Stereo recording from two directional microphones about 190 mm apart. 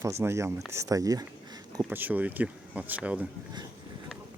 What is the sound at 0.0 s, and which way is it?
Speech, 15° right (ahead or behind).